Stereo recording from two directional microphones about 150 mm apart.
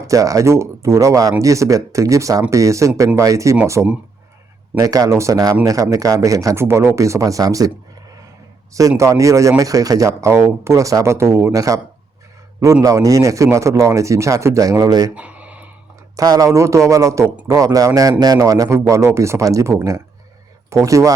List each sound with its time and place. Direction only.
0.1 s speech: 25° right (ahead or behind)
9.0 s speech: 20° right (ahead or behind)
15.1 s a sound: 10° right (ahead or behind)
16.1 s speech: 25° right (ahead or behind)